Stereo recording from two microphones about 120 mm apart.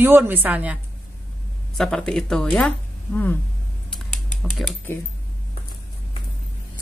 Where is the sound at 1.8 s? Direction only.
5° left (ahead or behind).